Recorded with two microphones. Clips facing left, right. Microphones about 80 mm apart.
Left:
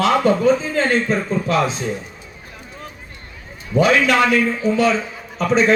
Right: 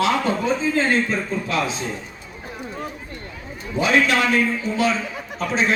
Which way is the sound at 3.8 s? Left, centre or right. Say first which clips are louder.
Left 4 dB; left.